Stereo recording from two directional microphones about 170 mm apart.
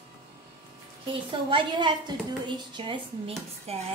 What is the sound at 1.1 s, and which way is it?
A woman's voice, 30° right (ahead or behind).